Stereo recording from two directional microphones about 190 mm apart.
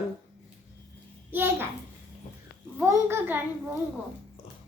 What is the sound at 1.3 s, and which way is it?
Speech, 10° right (ahead or behind).